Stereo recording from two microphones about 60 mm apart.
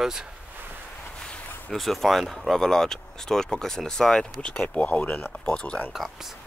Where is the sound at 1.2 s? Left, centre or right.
Centre.